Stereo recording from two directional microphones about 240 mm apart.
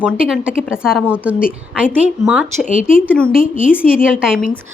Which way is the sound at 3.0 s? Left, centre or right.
Centre.